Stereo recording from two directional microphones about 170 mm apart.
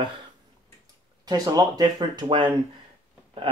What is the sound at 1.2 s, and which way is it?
Speech, 20° right (ahead or behind).